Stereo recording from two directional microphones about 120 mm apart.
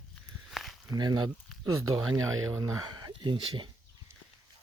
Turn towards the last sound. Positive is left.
turn(degrees=-45)  # may be behind; listen again after turning